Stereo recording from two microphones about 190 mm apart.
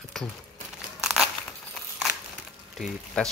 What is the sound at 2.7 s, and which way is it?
Speech, centre (ahead or behind).